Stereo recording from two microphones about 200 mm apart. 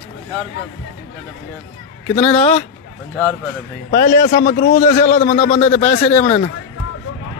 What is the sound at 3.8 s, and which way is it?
Speech, 55° left (ahead or behind).